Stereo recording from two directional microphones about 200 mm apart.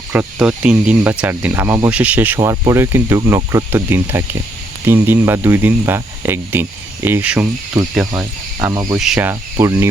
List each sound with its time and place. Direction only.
0.1 s speech: 5° right (ahead or behind)
7.8 s speech: 15° right (ahead or behind)
9.0 s speech: 5° right (ahead or behind)
9.3 s speech: 15° right (ahead or behind)